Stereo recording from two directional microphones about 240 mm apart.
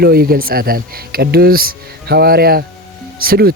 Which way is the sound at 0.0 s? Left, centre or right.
Right.